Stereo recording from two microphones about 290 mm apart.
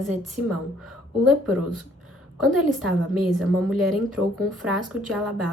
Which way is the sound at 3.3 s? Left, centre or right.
Centre.